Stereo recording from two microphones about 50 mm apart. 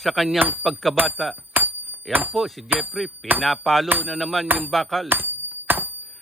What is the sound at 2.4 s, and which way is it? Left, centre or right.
Speech, centre.